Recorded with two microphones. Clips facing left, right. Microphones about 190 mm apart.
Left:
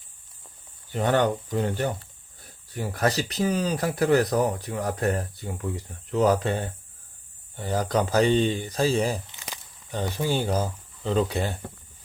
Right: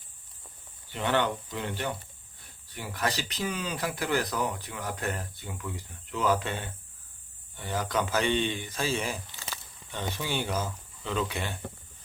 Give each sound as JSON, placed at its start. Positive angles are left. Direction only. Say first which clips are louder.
{"t": 0.9, "sound": "speech", "louder": "left 5 dB", "side_deg": 40}
{"t": 9.3, "sound": "a sound", "louder": "left 1 dB", "side_deg": 15}
{"t": 9.9, "sound": "speech", "louder": "left 6 dB", "side_deg": 35}